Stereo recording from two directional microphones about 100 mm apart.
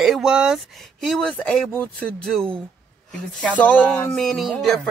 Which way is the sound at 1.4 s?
15° left (ahead or behind).